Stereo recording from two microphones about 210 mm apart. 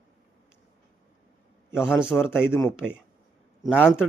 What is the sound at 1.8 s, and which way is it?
A man's voice, 5° right (ahead or behind).